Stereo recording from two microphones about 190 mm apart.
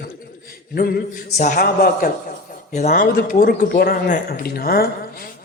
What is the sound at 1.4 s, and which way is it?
Speech, 50° left (ahead or behind).